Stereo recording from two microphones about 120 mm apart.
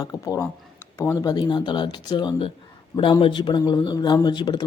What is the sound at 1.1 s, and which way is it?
Speech, 35° left (ahead or behind).